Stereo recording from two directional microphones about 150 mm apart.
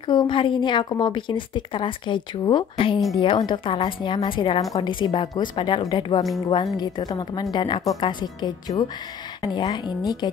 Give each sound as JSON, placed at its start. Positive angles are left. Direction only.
{"t": 0.0, "sound": "a woman's voice", "side_deg": 30}